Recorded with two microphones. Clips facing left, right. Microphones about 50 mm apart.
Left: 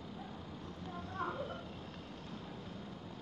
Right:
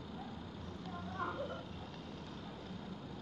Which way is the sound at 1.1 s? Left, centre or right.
Centre.